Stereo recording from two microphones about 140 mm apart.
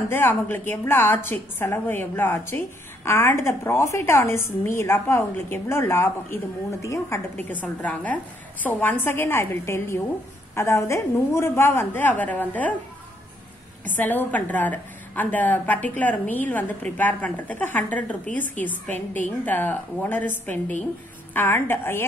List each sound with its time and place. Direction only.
0.1 s a woman's voice: 15° left (ahead or behind)
13.9 s a woman's voice: 10° left (ahead or behind)